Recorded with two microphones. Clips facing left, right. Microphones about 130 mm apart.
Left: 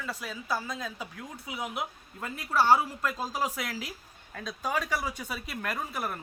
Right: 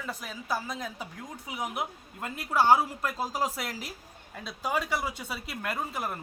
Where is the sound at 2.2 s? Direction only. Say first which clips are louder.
Right 1 dB; 15° right (ahead or behind).